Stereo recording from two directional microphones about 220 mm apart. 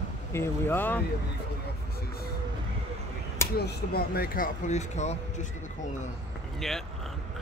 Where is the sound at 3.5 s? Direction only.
45° left (ahead or behind).